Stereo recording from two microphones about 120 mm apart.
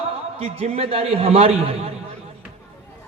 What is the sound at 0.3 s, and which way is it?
A man's voice, 60° right (ahead or behind).